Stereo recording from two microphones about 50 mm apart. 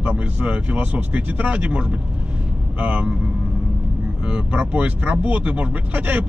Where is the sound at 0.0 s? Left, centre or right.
Right.